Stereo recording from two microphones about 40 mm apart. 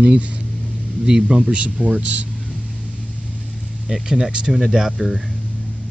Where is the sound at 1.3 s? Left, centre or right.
Right.